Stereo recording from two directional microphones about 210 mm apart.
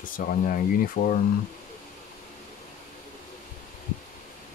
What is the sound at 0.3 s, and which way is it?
Speech, 40° left (ahead or behind).